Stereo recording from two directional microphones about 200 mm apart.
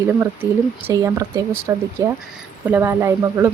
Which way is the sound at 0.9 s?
15° right (ahead or behind).